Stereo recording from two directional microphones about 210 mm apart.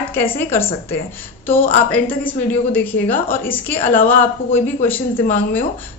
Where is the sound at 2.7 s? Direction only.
10° left (ahead or behind).